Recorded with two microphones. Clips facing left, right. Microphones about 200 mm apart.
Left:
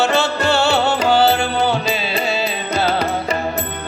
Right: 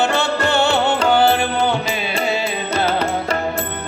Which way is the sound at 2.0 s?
20° right (ahead or behind).